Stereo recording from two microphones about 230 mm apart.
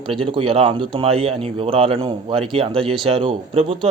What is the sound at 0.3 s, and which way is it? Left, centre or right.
Speech, right.